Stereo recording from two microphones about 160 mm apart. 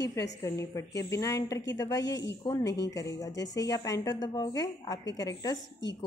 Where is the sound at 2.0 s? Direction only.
90° left.